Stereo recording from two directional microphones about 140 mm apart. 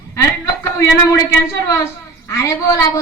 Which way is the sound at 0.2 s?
20° left (ahead or behind).